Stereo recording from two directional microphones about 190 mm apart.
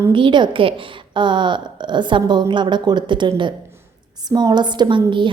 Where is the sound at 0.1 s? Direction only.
25° right (ahead or behind).